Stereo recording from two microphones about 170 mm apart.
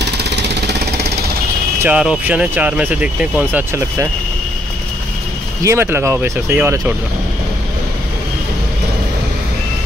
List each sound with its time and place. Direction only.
0.2 s jackhammer: 80° right
1.8 s speech: 5° right (ahead or behind)
5.6 s speech: 15° right (ahead or behind)